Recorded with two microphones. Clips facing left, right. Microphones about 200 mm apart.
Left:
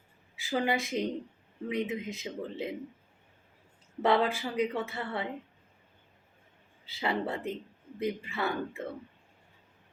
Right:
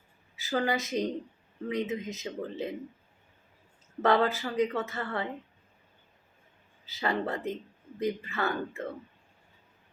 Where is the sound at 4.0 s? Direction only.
15° left (ahead or behind).